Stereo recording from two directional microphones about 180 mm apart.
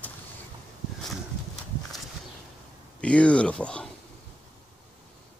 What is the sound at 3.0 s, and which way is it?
Speech, 5° left (ahead or behind).